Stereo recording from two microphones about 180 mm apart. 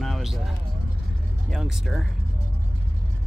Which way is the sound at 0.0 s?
Centre (ahead or behind).